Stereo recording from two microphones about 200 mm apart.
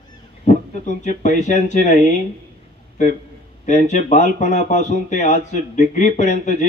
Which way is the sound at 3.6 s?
35° left (ahead or behind).